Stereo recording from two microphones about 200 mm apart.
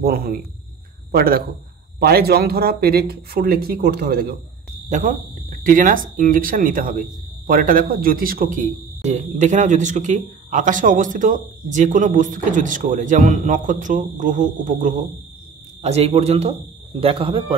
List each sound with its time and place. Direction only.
0.0 s speech: 45° right (ahead or behind)
4.8 s speech: 40° right (ahead or behind)